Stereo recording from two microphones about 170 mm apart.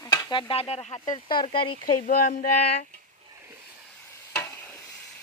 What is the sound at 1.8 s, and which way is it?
Speech, 60° left (ahead or behind).